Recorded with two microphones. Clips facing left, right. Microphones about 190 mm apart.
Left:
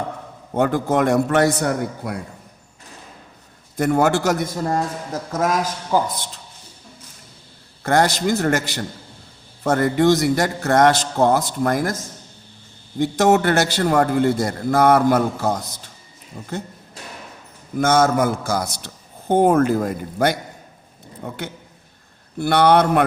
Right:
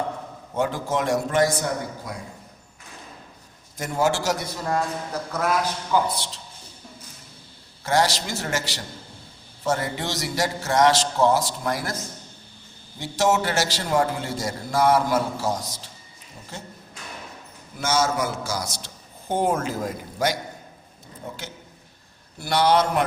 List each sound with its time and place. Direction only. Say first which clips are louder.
0.5 s a man's voice: left 6 dB; 60° left (ahead or behind)
3.8 s a man's voice: left 6 dB; 60° left (ahead or behind)
7.9 s a man's voice: left 5 dB; 55° left (ahead or behind)
17.7 s a man's voice: left 7 dB; 55° left (ahead or behind)